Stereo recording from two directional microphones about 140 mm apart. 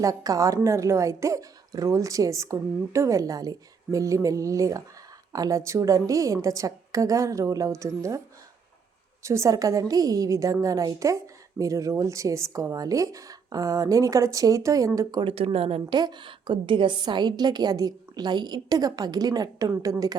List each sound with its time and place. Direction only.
0.0 s a woman's voice: 25° right (ahead or behind)
9.2 s a woman's voice: 20° right (ahead or behind)
15.2 s speech: 40° right (ahead or behind)
16.0 s a woman's voice: 30° right (ahead or behind)